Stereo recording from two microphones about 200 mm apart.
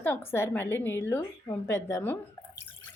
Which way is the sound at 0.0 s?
10° left (ahead or behind).